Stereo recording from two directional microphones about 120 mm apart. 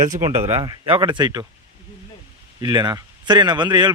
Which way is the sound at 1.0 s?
35° right (ahead or behind).